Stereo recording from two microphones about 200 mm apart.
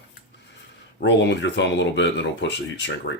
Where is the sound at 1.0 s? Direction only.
60° left (ahead or behind).